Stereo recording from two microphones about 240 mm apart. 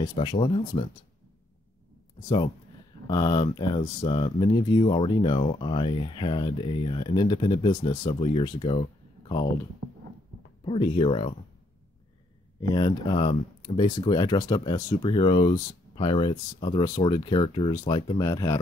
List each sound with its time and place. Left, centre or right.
0.0 s speech: left
2.1 s speech: centre
10.6 s speech: left
12.5 s speech: centre